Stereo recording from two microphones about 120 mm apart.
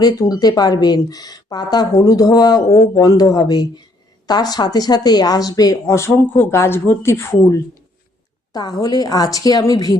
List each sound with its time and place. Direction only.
0.0 s speech: 30° left (ahead or behind)
2.6 s speech: 60° left (ahead or behind)
2.9 s a woman's voice: 30° left (ahead or behind)